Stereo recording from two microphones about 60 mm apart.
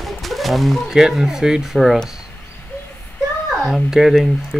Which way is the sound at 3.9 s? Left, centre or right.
Centre.